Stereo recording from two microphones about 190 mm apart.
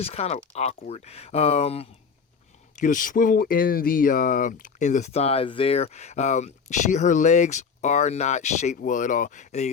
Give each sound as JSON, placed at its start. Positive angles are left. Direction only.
{"t": 0.0, "sound": "speech", "side_deg": 35}
{"t": 2.7, "sound": "speech", "side_deg": 45}